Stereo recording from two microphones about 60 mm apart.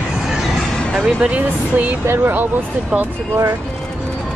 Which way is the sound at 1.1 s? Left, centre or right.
Right.